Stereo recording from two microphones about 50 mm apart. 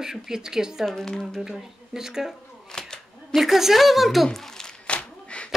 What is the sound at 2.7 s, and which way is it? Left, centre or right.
Single-lens reflex camera, centre.